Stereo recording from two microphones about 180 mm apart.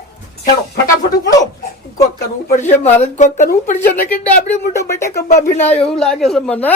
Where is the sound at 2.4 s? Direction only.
40° left (ahead or behind).